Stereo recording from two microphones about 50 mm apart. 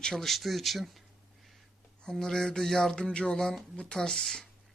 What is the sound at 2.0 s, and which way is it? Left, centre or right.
Mantra, centre.